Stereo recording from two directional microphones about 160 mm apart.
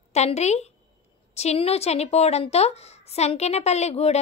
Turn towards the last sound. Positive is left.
turn(degrees=40)  # may be behind; listen again after turning